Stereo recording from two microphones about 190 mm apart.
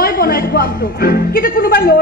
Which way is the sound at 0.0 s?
50° left (ahead or behind).